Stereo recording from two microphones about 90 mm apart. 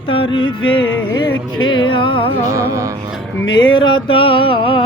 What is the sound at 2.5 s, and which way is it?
Speech, 35° right (ahead or behind).